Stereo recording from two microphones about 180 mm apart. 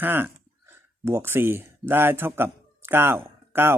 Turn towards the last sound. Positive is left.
turn(degrees=-10)  # may be behind; listen again after turning